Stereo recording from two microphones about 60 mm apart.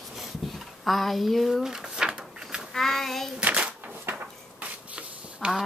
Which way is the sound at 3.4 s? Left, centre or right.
Right.